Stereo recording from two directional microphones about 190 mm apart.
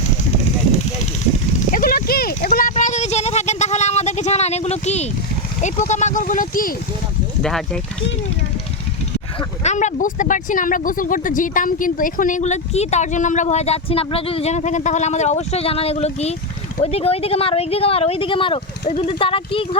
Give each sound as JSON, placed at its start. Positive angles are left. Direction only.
{"t": 1.5, "sound": "a sound", "side_deg": 45}
{"t": 5.6, "sound": "speech", "side_deg": 40}
{"t": 9.6, "sound": "speech", "side_deg": 40}